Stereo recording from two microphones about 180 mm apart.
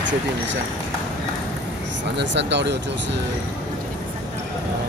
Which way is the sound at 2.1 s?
75° right (ahead or behind).